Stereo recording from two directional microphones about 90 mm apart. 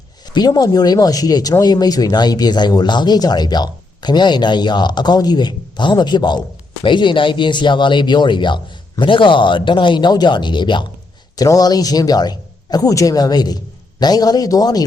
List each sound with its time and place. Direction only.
0.3 s speech: 50° left (ahead or behind)
11.3 s speech: 45° left (ahead or behind)